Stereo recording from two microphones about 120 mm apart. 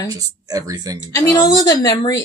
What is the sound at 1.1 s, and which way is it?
A woman's voice, 30° left (ahead or behind).